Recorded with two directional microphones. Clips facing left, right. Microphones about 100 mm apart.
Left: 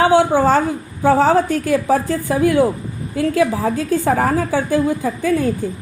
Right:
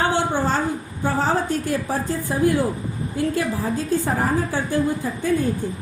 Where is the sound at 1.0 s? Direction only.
90° left.